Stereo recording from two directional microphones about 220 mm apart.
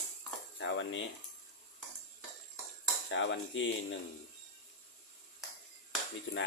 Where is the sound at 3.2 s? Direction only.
55° left (ahead or behind).